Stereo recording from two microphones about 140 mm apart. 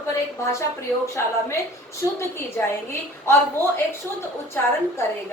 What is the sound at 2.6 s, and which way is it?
Speech, 15° left (ahead or behind).